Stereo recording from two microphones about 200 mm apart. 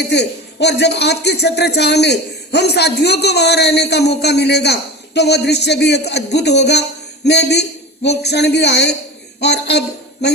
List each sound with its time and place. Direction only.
0.1 s a man's voice: 55° left (ahead or behind)